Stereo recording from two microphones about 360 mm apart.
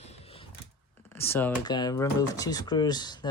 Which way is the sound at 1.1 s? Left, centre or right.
Centre.